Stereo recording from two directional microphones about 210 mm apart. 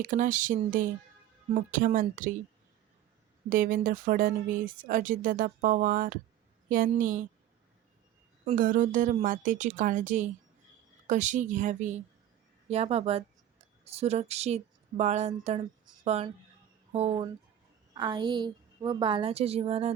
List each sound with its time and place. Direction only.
0.0 s speech: 40° right (ahead or behind)
3.5 s speech: 40° right (ahead or behind)
8.4 s a woman's voice: 40° right (ahead or behind)